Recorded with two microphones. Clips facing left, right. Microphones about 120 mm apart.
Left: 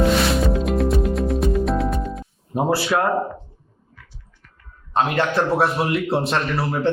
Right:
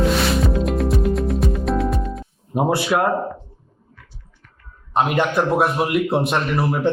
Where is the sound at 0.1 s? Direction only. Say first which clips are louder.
Left 1 dB; centre (ahead or behind).